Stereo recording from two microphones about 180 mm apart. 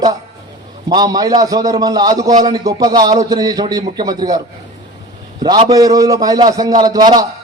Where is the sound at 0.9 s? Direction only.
20° right (ahead or behind).